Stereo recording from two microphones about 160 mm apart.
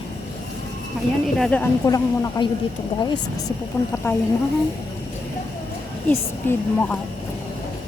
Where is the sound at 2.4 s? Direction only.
30° left (ahead or behind).